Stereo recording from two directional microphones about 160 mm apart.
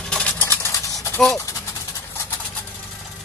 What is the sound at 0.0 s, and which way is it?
Vehicle, 5° left (ahead or behind).